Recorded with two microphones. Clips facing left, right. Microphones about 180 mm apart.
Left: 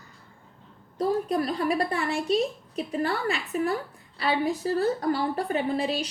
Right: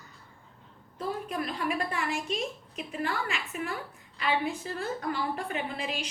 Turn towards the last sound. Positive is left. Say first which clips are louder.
# left 8 dB
turn(degrees=35)  # may be behind; listen again after turning